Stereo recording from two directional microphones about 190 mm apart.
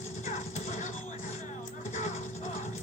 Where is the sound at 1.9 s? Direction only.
40° left (ahead or behind).